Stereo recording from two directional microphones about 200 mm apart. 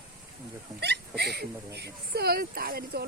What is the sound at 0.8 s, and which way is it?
Speech, 55° right (ahead or behind).